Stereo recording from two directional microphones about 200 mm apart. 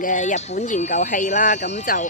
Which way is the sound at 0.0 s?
40° left (ahead or behind).